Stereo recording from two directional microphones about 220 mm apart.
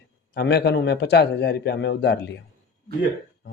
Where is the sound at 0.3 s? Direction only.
45° left (ahead or behind).